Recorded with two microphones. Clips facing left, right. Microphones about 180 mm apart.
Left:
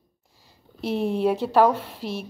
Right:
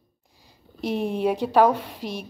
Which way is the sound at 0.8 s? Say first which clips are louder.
Left 1 dB; 15° right (ahead or behind).